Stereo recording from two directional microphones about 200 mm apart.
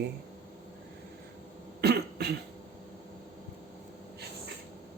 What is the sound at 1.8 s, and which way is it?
Cough, 55° right (ahead or behind).